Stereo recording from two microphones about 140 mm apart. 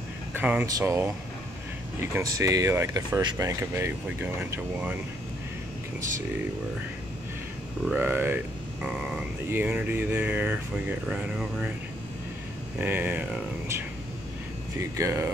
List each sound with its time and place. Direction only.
0.3 s speech: 10° right (ahead or behind)
7.9 s speech: 15° right (ahead or behind)
12.8 s speech: 15° right (ahead or behind)
14.8 s speech: 20° right (ahead or behind)